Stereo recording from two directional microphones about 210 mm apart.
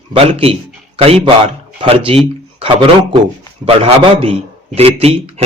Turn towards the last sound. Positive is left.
turn(degrees=-30)  # may be behind; listen again after turning